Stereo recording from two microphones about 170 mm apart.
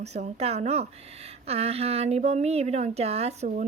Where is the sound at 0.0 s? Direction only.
40° right (ahead or behind).